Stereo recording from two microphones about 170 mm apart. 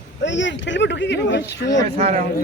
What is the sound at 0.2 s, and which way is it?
Speech, 90° left.